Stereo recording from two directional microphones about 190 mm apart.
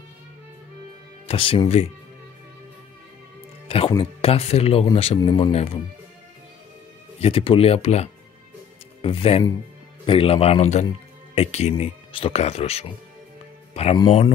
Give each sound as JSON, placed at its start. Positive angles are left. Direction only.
{"t": 1.2, "sound": "a man's voice", "side_deg": 30}
{"t": 3.6, "sound": "music", "side_deg": 30}
{"t": 3.9, "sound": "speech", "side_deg": 30}
{"t": 7.2, "sound": "a man's voice", "side_deg": 30}